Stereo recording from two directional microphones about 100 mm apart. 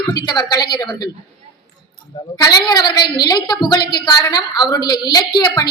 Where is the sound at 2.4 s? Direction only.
45° left (ahead or behind).